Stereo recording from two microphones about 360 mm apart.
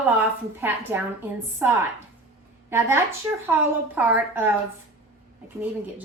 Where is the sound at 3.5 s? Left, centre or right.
Centre.